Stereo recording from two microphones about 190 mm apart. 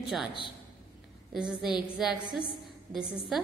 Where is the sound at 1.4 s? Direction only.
5° right (ahead or behind).